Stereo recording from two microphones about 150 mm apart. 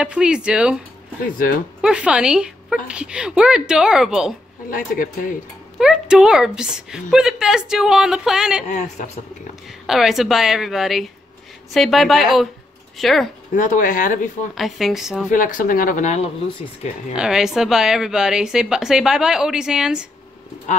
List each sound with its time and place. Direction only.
0.0 s speech: 5° right (ahead or behind)
1.8 s a woman's voice: 5° right (ahead or behind)
4.6 s speech: 70° left (ahead or behind)
5.8 s a woman's voice: 5° right (ahead or behind)
8.6 s speech: 50° left (ahead or behind)
9.8 s a woman's voice: centre (ahead or behind)
13.6 s speech: 60° left (ahead or behind)
14.5 s a woman's voice: centre (ahead or behind)
15.3 s speech: 65° left (ahead or behind)
17.1 s a woman's voice: 5° right (ahead or behind)